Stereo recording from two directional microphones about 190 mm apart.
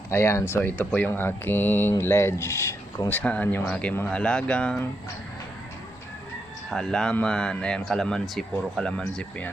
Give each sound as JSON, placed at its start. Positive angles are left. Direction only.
{"t": 0.1, "sound": "speech", "side_deg": 15}
{"t": 6.7, "sound": "speech", "side_deg": 5}